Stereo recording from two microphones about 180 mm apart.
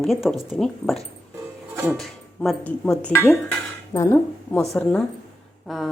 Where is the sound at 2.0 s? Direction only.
Centre (ahead or behind).